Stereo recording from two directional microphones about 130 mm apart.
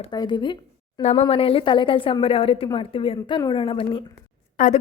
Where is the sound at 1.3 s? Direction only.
45° left (ahead or behind).